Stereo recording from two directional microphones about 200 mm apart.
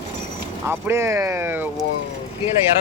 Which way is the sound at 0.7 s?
15° right (ahead or behind).